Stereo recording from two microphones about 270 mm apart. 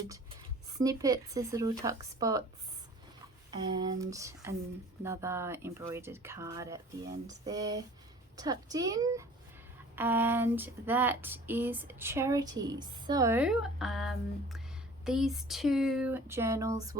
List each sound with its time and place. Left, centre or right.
0.8 s speech: centre
3.5 s speech: centre